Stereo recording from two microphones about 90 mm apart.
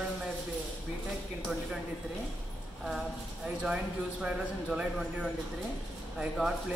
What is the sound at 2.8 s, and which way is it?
Speech, 10° right (ahead or behind).